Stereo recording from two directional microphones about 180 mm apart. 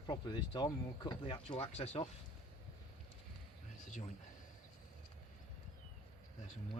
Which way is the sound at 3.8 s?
45° left (ahead or behind).